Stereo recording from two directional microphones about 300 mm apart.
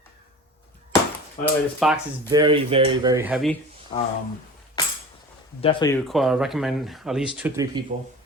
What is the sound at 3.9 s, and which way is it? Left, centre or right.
Speech, centre.